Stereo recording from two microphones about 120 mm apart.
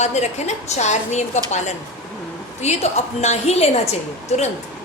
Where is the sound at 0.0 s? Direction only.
70° left (ahead or behind).